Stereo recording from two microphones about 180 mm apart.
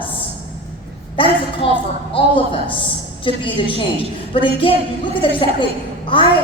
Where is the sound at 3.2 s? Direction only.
30° left (ahead or behind).